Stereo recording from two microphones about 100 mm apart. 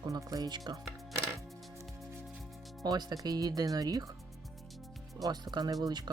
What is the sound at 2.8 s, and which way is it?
Speech, 45° right (ahead or behind).